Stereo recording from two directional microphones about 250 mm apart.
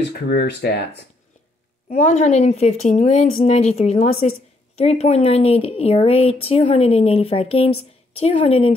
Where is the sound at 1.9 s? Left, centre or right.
Left.